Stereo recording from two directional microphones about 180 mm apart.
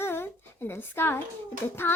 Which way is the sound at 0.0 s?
10° left (ahead or behind).